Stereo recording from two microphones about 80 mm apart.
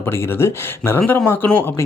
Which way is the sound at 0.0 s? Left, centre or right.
Left.